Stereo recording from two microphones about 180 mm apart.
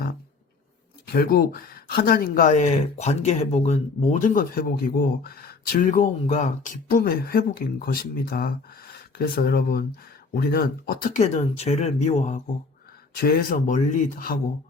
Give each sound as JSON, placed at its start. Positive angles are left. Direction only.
{"t": 1.0, "sound": "speech", "side_deg": 60}
{"t": 13.1, "sound": "speech", "side_deg": 55}